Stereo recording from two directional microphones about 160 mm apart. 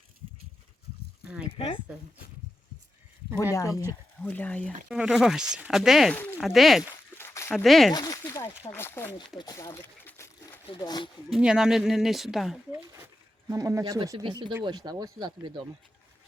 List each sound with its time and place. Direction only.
1.5 s speech: 35° left (ahead or behind)
3.5 s speech: 20° left (ahead or behind)
4.9 s speech: centre (ahead or behind)
6.1 s speech: 10° left (ahead or behind)
6.4 s speech: centre (ahead or behind)
6.9 s a sound: 15° left (ahead or behind)
7.5 s speech: centre (ahead or behind)
7.9 s speech: 25° left (ahead or behind)
9.4 s a sound: 20° left (ahead or behind)
10.8 s speech: 25° left (ahead or behind)
11.3 s speech: 5° right (ahead or behind)
12.7 s a sound: 15° right (ahead or behind)
13.5 s speech: 20° right (ahead or behind)